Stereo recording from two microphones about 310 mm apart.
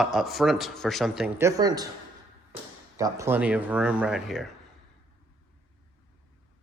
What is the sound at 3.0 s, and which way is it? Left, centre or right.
A man's voice, centre.